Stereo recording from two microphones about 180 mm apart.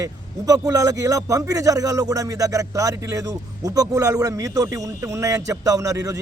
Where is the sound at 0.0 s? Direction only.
20° right (ahead or behind).